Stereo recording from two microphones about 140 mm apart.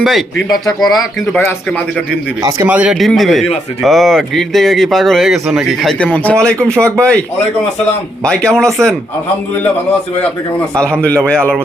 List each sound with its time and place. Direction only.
0.0 s speech: centre (ahead or behind)
0.5 s speech: 25° left (ahead or behind)
0.8 s speech: centre (ahead or behind)
2.6 s speech: 10° right (ahead or behind); by 6.5 s 5° left (ahead or behind)
6.7 s speech: 20° right (ahead or behind)
8.2 s speech: 5° left (ahead or behind)